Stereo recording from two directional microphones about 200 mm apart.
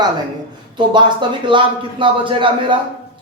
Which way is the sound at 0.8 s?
25° right (ahead or behind).